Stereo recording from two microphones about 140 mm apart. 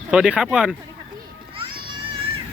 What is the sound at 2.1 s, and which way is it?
Music, 40° right (ahead or behind).